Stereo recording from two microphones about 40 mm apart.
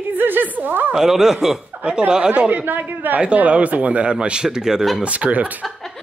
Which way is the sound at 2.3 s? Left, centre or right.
Right.